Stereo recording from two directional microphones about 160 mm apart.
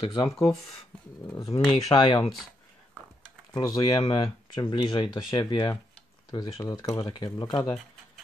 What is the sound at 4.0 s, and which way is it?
Speech, 30° left (ahead or behind).